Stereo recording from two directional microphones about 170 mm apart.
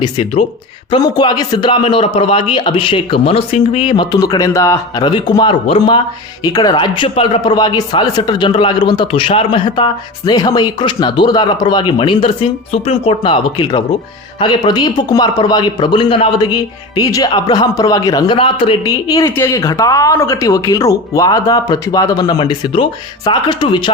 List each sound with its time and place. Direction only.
0.0 s speech: 35° left (ahead or behind)